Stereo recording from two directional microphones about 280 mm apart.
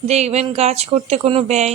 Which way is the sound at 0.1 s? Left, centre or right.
Right.